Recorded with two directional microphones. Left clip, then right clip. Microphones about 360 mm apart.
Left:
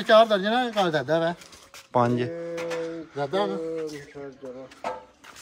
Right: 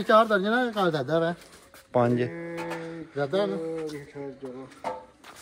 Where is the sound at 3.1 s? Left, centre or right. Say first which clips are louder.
Even; centre.